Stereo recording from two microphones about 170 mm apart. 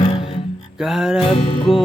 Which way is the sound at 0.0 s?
30° left (ahead or behind).